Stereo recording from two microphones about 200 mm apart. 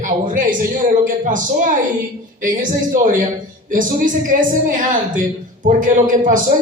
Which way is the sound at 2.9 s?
40° right (ahead or behind).